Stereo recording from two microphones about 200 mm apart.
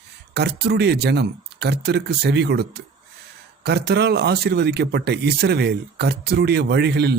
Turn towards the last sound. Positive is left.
turn(degrees=-55)  # may be behind; listen again after turning